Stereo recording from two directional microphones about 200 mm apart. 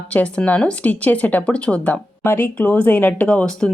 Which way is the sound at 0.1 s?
5° left (ahead or behind).